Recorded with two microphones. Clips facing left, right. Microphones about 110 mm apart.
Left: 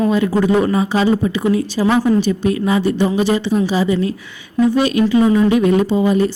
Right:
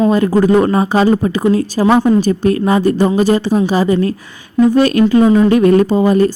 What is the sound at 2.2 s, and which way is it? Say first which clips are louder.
A woman's voice: right 3 dB; 50° right (ahead or behind).